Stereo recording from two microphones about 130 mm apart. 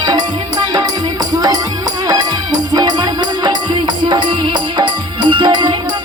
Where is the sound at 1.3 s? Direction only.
30° right (ahead or behind).